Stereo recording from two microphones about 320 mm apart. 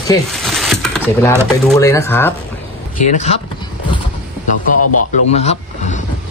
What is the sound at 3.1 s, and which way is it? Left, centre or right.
Speech, left.